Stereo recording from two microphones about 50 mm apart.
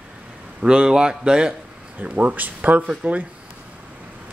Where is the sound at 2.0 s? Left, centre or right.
Right.